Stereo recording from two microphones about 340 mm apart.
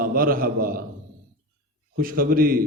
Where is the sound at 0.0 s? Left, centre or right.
Right.